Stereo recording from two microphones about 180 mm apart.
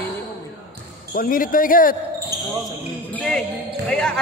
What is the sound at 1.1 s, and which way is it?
Speech, 50° left (ahead or behind).